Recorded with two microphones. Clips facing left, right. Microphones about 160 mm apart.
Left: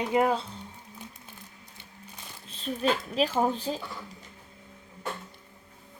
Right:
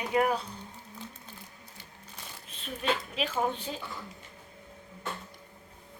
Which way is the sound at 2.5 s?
35° left (ahead or behind).